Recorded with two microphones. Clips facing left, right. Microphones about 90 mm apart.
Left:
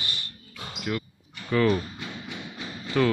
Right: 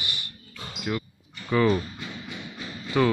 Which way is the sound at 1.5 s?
10° right (ahead or behind).